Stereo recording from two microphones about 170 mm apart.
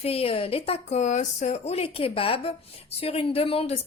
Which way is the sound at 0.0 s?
35° left (ahead or behind).